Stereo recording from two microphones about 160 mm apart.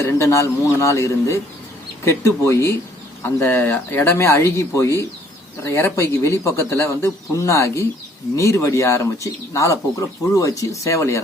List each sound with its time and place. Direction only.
0.0 s speech: 20° left (ahead or behind)